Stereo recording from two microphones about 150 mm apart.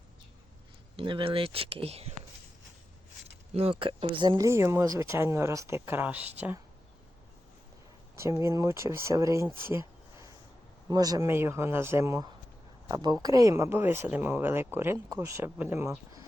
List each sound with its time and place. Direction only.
0.9 s speech: 35° right (ahead or behind)
3.5 s speech: 40° right (ahead or behind)
4.4 s speech: 20° right (ahead or behind)
8.1 s speech: 20° right (ahead or behind)